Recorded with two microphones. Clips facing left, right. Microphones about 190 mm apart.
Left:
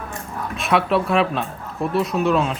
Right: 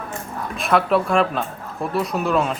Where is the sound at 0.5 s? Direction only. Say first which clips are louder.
Right 1 dB; centre (ahead or behind).